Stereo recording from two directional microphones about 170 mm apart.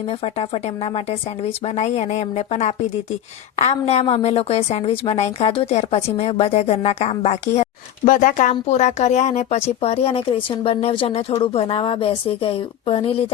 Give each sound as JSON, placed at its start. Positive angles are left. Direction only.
{"t": 0.1, "sound": "a woman's voice", "side_deg": 35}